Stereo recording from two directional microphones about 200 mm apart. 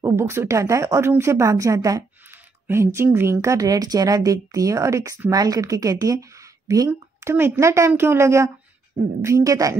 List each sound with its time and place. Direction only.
0.0 s speech: 10° right (ahead or behind)